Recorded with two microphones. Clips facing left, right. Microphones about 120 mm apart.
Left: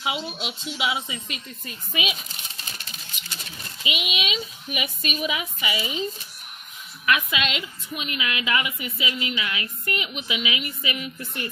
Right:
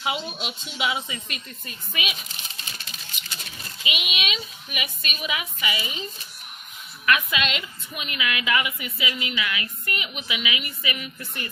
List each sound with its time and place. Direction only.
0.0 s speech: 15° left (ahead or behind)
3.8 s a woman's voice: 30° left (ahead or behind)
7.1 s a woman's voice: 15° left (ahead or behind)